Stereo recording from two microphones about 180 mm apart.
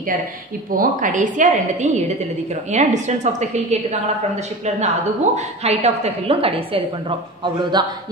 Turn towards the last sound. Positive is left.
turn(degrees=-25)  # may be behind; listen again after turning